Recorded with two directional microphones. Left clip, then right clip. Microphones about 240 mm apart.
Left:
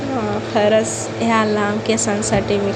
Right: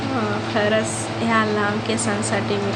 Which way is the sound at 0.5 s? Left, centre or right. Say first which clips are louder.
Left 6 dB; centre.